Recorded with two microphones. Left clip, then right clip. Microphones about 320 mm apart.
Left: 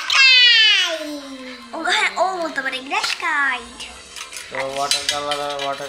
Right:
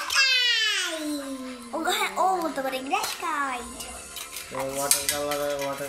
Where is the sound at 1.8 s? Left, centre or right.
Centre.